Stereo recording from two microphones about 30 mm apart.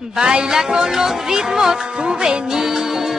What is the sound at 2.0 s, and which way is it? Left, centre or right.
Music, right.